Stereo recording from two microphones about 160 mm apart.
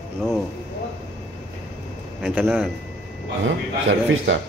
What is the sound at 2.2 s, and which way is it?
Speech, 5° right (ahead or behind).